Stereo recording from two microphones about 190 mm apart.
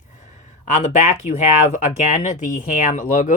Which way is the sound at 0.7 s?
40° left (ahead or behind).